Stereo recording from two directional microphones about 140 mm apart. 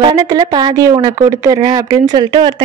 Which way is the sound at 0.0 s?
30° right (ahead or behind).